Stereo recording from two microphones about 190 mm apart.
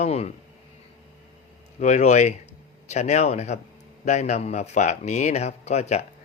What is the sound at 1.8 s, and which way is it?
Speech, 35° left (ahead or behind).